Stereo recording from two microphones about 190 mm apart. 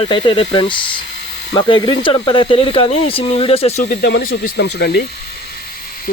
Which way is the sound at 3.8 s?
55° left (ahead or behind).